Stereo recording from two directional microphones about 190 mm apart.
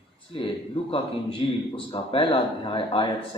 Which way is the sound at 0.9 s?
30° left (ahead or behind).